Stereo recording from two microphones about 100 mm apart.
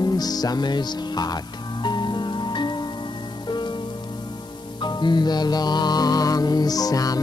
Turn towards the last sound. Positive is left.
turn(degrees=40)  # may be behind; listen again after turning